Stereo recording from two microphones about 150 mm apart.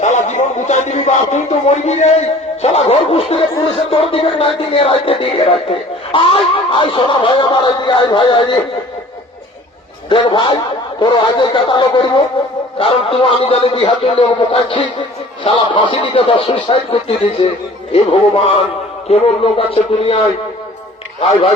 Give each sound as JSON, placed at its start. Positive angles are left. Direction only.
{"t": 0.0, "sound": "a man's voice", "side_deg": 50}
{"t": 10.1, "sound": "a man's voice", "side_deg": 35}